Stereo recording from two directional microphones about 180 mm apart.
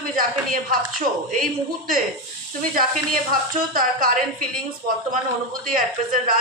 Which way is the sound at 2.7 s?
50° right (ahead or behind).